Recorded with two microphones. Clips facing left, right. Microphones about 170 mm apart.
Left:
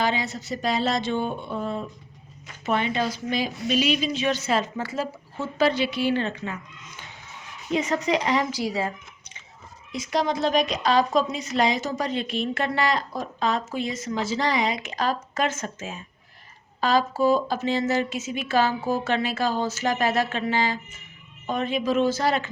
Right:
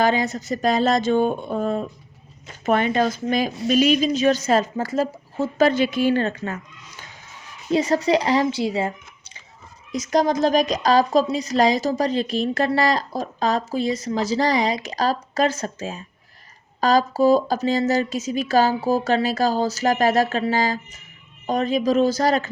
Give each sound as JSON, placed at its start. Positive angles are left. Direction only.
{"t": 0.0, "sound": "a woman's voice", "side_deg": -45}
{"t": 9.9, "sound": "a woman's voice", "side_deg": -40}